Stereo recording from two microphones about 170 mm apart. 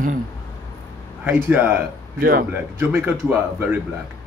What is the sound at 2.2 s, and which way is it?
Speech, 60° right (ahead or behind).